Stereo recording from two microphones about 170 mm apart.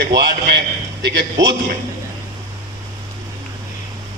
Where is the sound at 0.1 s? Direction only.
75° right (ahead or behind).